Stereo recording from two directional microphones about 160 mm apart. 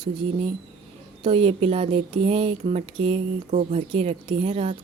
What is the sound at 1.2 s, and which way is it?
Speech, 35° right (ahead or behind).